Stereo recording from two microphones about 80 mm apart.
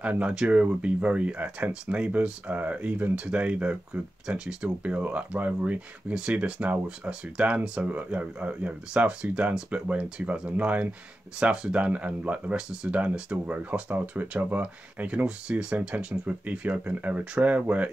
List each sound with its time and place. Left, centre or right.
0.0 s speech: centre